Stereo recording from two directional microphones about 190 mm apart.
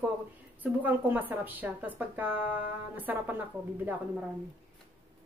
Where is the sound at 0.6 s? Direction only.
10° right (ahead or behind).